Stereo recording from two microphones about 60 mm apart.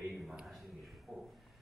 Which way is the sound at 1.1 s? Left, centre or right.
Centre.